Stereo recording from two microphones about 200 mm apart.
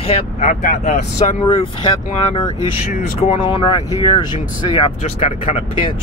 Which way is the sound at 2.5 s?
35° left (ahead or behind).